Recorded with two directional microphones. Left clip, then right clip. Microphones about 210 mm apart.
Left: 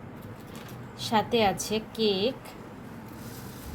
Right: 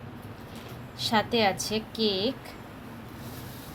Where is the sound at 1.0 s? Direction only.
10° left (ahead or behind).